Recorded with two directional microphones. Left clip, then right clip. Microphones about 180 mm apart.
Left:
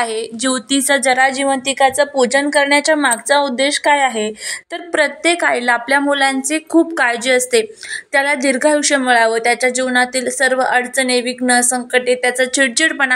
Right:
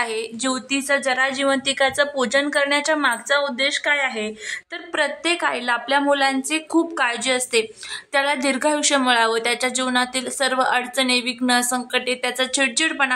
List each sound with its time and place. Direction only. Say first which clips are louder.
0.0 s a woman's voice: left 5 dB; 15° left (ahead or behind)